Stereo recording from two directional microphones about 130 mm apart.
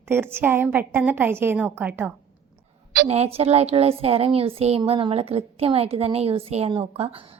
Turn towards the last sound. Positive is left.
turn(degrees=-50)  # may be behind; listen again after turning